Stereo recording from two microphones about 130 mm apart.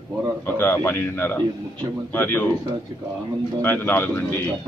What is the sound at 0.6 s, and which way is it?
A man's voice, 15° left (ahead or behind).